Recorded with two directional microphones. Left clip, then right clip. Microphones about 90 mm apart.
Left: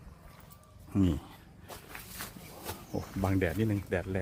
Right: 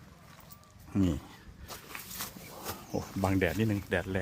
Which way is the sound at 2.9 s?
15° right (ahead or behind).